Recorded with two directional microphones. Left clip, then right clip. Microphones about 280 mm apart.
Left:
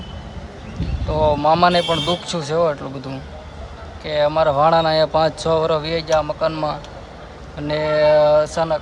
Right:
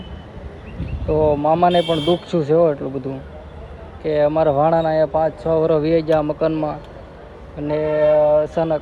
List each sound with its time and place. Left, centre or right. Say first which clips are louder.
1.1 s speech: right 1 dB; left
1.4 s a man's voice: left 1 dB; centre